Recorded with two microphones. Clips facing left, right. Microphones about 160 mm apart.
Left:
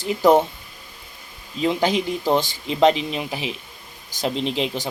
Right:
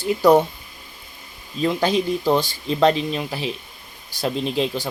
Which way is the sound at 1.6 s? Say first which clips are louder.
Right 1 dB; 20° left (ahead or behind).